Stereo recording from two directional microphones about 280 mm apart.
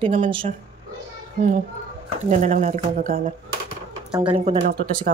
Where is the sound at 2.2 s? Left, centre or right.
Right.